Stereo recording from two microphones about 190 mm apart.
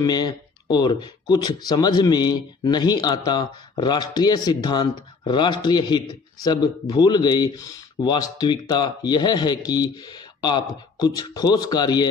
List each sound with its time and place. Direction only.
0.0 s speech: 20° left (ahead or behind)